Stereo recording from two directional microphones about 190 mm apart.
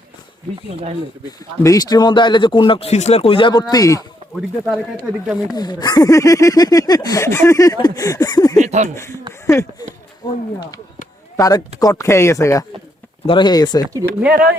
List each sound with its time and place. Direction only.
0.7 s speech: 30° right (ahead or behind)
1.6 s speech: 20° left (ahead or behind)
4.4 s speech: centre (ahead or behind)
5.5 s speech: 20° left (ahead or behind)
8.5 s speech: 40° right (ahead or behind)
9.5 s speech: 15° left (ahead or behind)
11.3 s speech: 20° left (ahead or behind)
13.9 s speech: 10° right (ahead or behind)